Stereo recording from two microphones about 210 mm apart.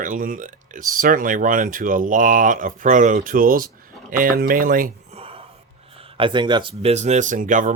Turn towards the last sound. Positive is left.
turn(degrees=-35)  # may be behind; listen again after turning